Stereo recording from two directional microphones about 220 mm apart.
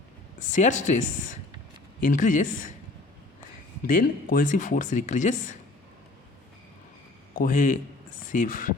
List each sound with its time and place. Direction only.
0.3 s speech: 35° left (ahead or behind)
3.8 s speech: 40° left (ahead or behind)
7.3 s speech: 35° left (ahead or behind)